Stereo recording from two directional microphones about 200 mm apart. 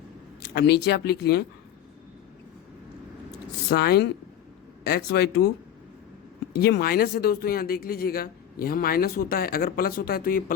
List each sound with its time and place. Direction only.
0.5 s speech: 55° left (ahead or behind)
3.3 s a sound: 55° left (ahead or behind)
4.9 s speech: 50° left (ahead or behind)
6.6 s speech: 55° left (ahead or behind)